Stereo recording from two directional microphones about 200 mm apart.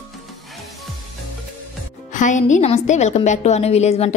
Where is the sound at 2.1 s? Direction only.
40° left (ahead or behind).